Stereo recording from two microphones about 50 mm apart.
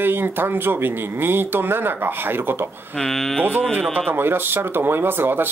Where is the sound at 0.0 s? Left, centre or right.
Right.